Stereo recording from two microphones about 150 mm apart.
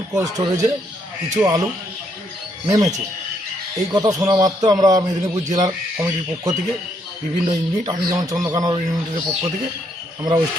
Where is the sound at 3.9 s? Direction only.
25° right (ahead or behind).